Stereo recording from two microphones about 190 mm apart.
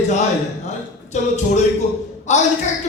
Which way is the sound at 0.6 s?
40° left (ahead or behind).